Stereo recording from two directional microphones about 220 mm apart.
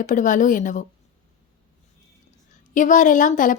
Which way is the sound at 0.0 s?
35° left (ahead or behind).